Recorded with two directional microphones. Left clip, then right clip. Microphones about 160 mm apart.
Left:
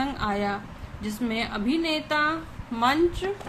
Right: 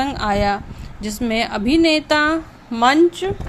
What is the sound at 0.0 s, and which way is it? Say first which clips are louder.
A woman's voice: right 8 dB; 55° right (ahead or behind).